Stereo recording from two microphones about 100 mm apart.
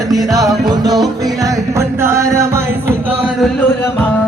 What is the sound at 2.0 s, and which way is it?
Music, 25° right (ahead or behind).